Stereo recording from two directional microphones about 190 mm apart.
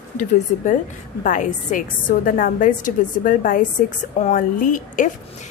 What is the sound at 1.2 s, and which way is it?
Speech, 45° left (ahead or behind).